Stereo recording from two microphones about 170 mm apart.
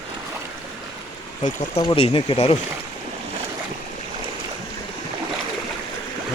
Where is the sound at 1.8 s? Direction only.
30° left (ahead or behind).